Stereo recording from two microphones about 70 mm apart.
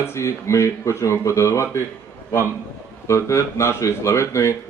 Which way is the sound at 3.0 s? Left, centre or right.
Left.